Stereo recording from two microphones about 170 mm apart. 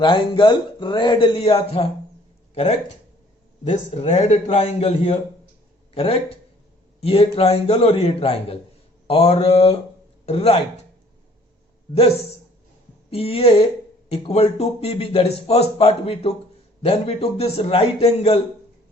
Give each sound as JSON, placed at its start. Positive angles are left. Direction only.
{"t": 0.0, "sound": "speech", "side_deg": 30}
{"t": 3.6, "sound": "speech", "side_deg": 40}
{"t": 13.1, "sound": "speech", "side_deg": 35}